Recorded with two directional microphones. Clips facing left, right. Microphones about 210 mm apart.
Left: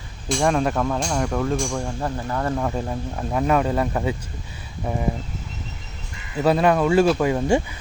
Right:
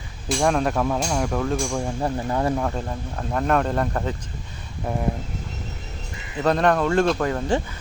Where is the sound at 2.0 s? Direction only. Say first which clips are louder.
Right 2 dB; 15° right (ahead or behind).